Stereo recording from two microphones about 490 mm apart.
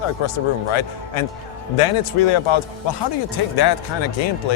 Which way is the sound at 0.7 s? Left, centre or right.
Left.